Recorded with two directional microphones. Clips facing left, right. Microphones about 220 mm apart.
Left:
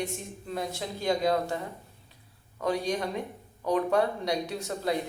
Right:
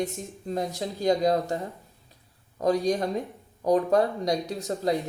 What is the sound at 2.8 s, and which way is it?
Speech, 35° right (ahead or behind).